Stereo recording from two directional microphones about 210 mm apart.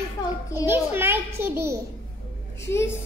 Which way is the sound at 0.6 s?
10° right (ahead or behind).